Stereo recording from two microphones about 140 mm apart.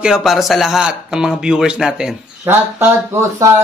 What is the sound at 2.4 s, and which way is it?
Speech, 15° right (ahead or behind).